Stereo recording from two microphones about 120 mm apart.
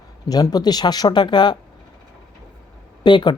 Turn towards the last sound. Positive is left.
turn(degrees=40)  # may be behind; listen again after turning